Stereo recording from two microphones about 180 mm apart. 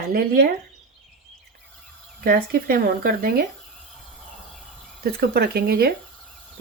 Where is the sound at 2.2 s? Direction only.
55° right (ahead or behind).